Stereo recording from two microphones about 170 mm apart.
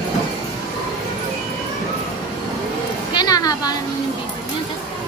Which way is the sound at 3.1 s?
25° left (ahead or behind).